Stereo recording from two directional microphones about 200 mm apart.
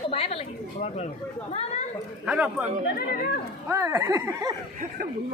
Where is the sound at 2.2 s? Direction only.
5° right (ahead or behind).